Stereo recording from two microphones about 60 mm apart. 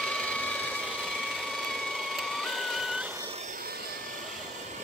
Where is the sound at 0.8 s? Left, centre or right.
Centre.